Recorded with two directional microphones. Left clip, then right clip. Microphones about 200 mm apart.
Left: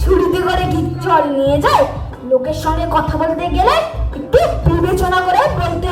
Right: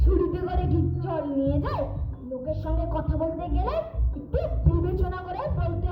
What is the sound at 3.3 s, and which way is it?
Speech, 30° left (ahead or behind).